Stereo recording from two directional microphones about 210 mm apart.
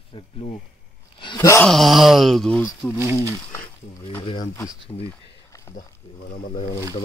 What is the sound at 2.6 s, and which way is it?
Speech, 10° left (ahead or behind).